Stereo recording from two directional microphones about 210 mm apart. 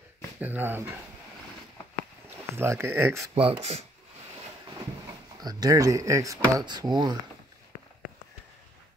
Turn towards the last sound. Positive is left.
turn(degrees=-20)  # may be behind; listen again after turning